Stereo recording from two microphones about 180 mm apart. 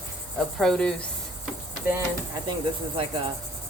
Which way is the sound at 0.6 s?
5° left (ahead or behind).